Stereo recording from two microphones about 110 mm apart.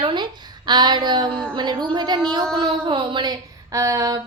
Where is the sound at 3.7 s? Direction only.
30° right (ahead or behind).